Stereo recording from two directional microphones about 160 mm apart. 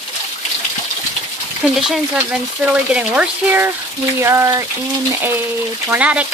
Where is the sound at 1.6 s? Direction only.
Centre (ahead or behind); by 4.6 s 15° right (ahead or behind).